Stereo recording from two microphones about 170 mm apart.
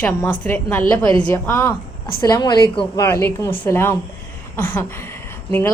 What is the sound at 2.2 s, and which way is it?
A woman's voice, 25° left (ahead or behind).